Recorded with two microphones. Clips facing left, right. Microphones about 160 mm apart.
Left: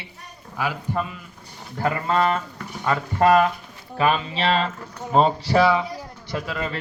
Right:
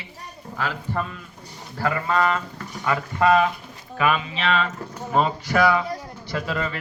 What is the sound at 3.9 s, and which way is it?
A man's voice, 35° left (ahead or behind).